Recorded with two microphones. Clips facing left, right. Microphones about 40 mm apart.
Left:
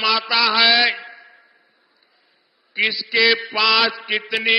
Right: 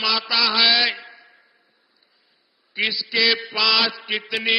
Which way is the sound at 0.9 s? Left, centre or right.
Centre.